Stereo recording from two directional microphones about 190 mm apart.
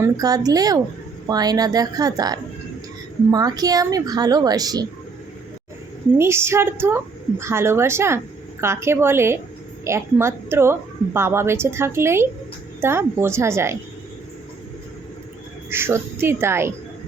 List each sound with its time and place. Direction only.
0.0 s speech: 20° right (ahead or behind)
6.1 s a woman's voice: 15° right (ahead or behind)
15.7 s a woman's voice: 10° right (ahead or behind)